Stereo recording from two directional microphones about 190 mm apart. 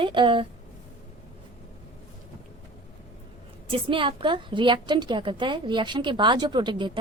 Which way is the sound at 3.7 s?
25° right (ahead or behind).